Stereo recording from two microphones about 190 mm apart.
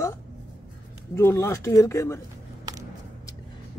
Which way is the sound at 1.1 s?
15° left (ahead or behind).